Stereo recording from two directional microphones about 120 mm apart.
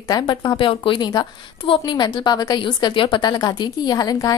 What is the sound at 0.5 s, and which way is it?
Speech, 45° left (ahead or behind).